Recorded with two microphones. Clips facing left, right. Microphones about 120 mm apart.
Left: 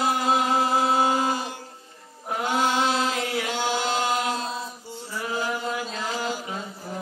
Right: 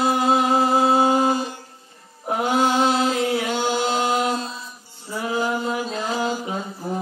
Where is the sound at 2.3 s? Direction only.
25° right (ahead or behind).